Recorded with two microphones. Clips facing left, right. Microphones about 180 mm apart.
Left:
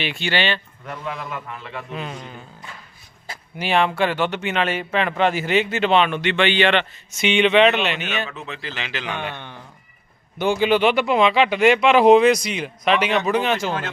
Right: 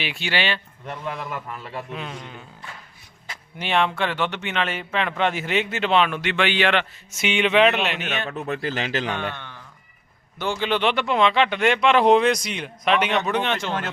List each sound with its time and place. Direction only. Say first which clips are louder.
0.0 s speech: left 3 dB; 5° right (ahead or behind)
1.9 s speech: left 2 dB; centre (ahead or behind)
3.6 s speech: left 3 dB; 5° left (ahead or behind)
8.3 s speech: right 6 dB; 50° right (ahead or behind)
9.3 s speech: left 3 dB; 15° left (ahead or behind)